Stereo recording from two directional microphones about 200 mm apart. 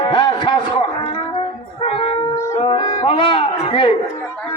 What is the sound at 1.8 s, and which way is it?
Shofar, 25° left (ahead or behind).